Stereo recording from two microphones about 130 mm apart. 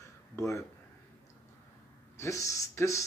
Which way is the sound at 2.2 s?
25° left (ahead or behind).